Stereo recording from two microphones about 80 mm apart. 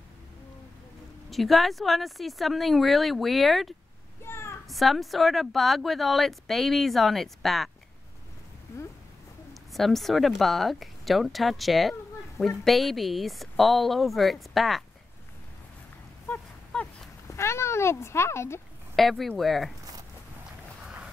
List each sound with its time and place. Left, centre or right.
1.3 s speech: centre
4.2 s a sound: left
4.6 s speech: centre
9.5 s speech: centre
17.3 s a sound: left
18.9 s speech: centre